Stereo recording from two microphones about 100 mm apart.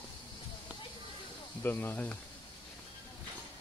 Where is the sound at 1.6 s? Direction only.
20° left (ahead or behind).